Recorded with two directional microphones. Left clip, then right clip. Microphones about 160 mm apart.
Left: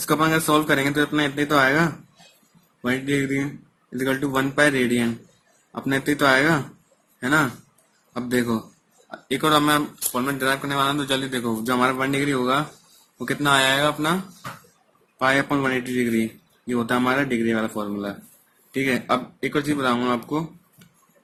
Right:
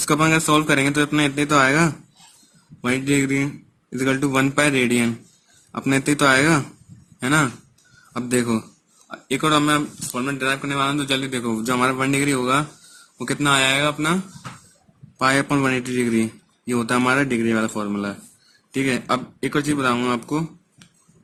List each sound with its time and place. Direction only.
0.2 s a man's voice: 60° right (ahead or behind)
8.1 s speech: 60° right (ahead or behind)
9.0 s speech: 50° right (ahead or behind)
15.2 s a man's voice: 65° right (ahead or behind)